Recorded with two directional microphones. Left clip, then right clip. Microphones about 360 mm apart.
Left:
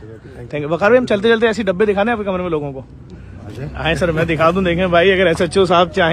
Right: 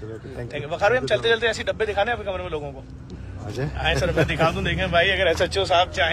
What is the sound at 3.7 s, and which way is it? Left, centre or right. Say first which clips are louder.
Speech: left 5 dB; centre.